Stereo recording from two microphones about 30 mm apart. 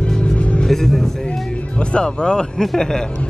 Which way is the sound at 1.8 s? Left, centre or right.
Left.